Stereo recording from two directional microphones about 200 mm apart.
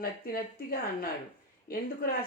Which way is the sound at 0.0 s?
50° left (ahead or behind).